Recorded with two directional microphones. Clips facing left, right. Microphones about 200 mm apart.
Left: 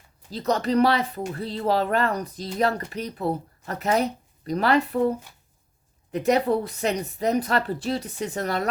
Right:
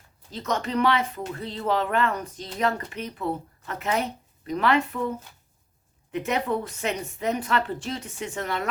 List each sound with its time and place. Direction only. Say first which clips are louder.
0.3 s speech: left 5 dB; 35° left (ahead or behind)